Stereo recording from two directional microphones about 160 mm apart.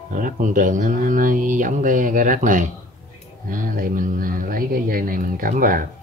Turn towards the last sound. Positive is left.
turn(degrees=-60)  # may be behind; listen again after turning